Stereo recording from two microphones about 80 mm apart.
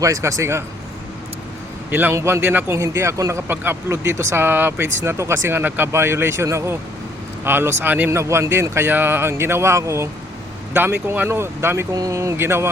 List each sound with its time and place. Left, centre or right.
0.0 s speech: right
1.9 s a man's voice: right
2.7 s speech: right
10.8 s speech: right
11.9 s speech: right